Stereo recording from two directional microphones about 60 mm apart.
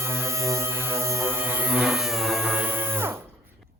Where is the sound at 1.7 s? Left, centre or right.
Centre.